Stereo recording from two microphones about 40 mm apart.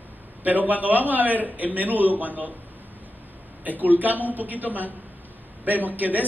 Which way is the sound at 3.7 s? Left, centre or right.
Right.